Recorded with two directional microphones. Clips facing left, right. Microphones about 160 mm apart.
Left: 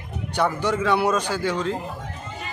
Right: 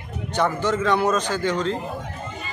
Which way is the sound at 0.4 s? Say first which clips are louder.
Right 1 dB; 10° left (ahead or behind).